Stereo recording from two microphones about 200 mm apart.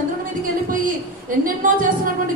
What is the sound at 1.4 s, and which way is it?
Speech, 45° right (ahead or behind).